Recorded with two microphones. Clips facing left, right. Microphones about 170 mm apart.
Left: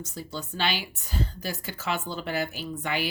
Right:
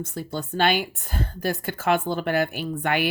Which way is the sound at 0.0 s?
55° right (ahead or behind).